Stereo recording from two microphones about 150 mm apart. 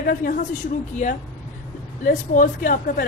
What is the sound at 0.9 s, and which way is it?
Speech, 50° left (ahead or behind).